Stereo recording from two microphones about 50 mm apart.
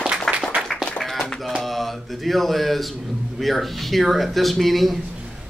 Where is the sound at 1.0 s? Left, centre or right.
Centre.